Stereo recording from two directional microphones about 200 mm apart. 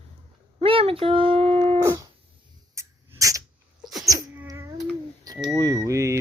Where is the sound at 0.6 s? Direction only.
30° right (ahead or behind).